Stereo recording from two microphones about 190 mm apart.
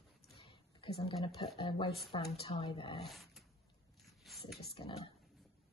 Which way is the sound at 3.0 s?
Centre (ahead or behind).